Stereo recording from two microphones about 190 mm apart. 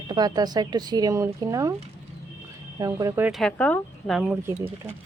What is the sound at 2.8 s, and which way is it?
Speech, 15° right (ahead or behind).